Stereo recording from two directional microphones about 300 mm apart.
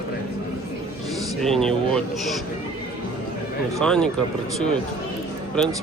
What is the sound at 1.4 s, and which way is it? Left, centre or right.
Speech, centre.